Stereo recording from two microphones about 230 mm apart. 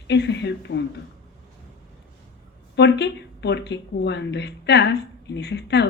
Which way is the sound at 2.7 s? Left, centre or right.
Left.